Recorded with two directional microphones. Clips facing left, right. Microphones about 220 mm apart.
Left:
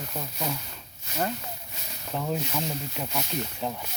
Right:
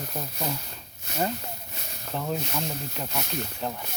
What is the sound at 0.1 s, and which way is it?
Speech, 5° right (ahead or behind).